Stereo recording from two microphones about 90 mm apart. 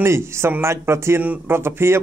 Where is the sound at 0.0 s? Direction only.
30° right (ahead or behind).